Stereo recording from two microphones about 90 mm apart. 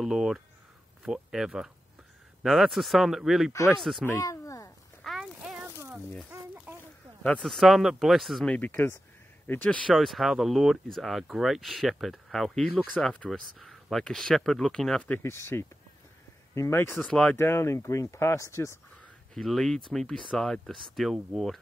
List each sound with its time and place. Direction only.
0.0 s speech: 5° right (ahead or behind)
4.1 s a sound: 35° left (ahead or behind)
5.0 s a sound: centre (ahead or behind)
7.2 s speech: centre (ahead or behind)
8.4 s speech: 15° left (ahead or behind)
9.8 s speech: centre (ahead or behind)
15.2 s speech: 30° left (ahead or behind)
17.0 s speech: 10° left (ahead or behind)
17.4 s speech: 30° left (ahead or behind)
19.3 s speech: 5° left (ahead or behind)